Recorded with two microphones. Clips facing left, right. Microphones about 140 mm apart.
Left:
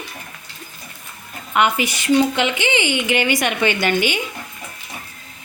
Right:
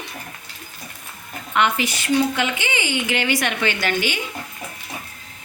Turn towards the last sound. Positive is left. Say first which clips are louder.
# left 4 dB
turn(degrees=15)  # may be behind; listen again after turning